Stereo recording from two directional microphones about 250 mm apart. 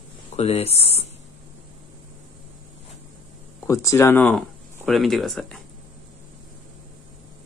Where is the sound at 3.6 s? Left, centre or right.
Centre.